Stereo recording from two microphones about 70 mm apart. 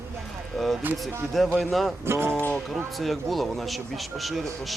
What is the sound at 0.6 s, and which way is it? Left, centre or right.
Speech, centre.